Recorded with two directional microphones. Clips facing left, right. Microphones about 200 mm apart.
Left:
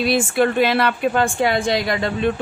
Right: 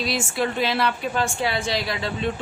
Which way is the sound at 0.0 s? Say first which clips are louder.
Left 7 dB; 60° left (ahead or behind).